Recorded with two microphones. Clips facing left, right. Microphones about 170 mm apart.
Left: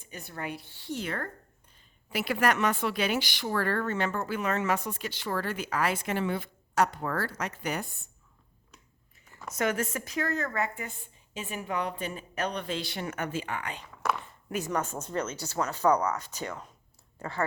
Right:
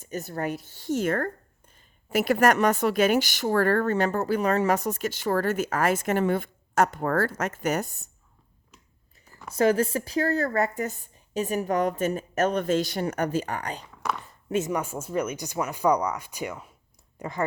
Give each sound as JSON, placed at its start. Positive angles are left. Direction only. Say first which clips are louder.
{"t": 0.0, "sound": "a woman's voice", "louder": "right 8 dB", "side_deg": -40}
{"t": 9.5, "sound": "a woman's voice", "louder": "right 8 dB", "side_deg": -30}
{"t": 14.0, "sound": "a sound", "louder": "even", "side_deg": 0}
{"t": 14.7, "sound": "speech", "louder": "right 3 dB", "side_deg": -10}